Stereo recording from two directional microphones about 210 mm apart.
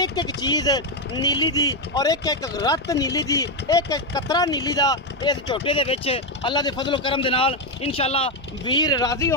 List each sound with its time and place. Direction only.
0.0 s speech: 20° left (ahead or behind)